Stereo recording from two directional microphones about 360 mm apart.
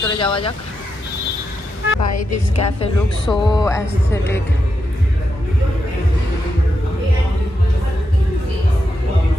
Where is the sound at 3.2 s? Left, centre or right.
Centre.